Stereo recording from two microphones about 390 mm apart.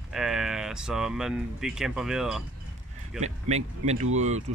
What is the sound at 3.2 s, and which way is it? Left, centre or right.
Speech, centre.